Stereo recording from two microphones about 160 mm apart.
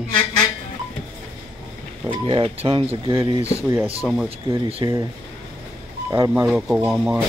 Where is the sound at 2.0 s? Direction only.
30° right (ahead or behind).